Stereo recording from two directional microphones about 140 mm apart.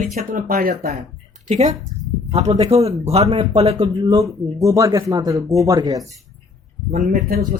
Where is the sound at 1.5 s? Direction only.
55° right (ahead or behind).